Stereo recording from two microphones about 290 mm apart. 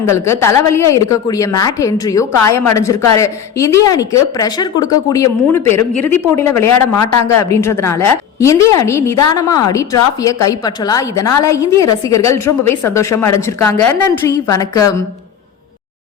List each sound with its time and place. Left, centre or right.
0.0 s a woman's voice: centre
5.9 s speech: left
6.3 s a woman's voice: centre
6.7 s speech: left
7.2 s a woman's voice: centre